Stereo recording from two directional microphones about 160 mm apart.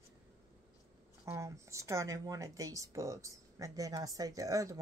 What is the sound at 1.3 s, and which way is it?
Speech, 20° right (ahead or behind).